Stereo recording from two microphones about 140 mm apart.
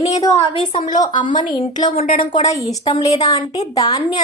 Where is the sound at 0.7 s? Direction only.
40° left (ahead or behind).